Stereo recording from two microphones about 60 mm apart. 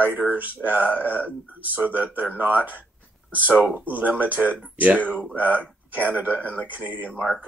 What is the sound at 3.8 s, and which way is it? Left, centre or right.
Speech, right.